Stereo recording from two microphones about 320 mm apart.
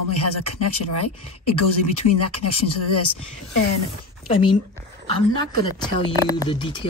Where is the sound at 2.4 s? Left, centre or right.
Left.